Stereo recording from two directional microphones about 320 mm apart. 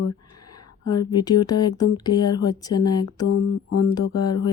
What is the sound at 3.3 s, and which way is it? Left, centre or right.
Mantra, left.